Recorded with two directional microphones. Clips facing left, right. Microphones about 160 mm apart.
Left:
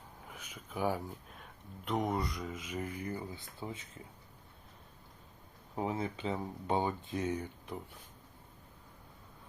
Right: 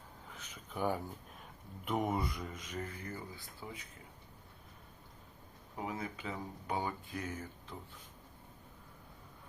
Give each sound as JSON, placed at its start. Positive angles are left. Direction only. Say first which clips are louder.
{"t": 0.3, "sound": "speech", "louder": "left 1 dB", "side_deg": 10}
{"t": 2.6, "sound": "speech", "louder": "left 6 dB", "side_deg": 10}
{"t": 5.7, "sound": "speech", "louder": "left 5 dB", "side_deg": 30}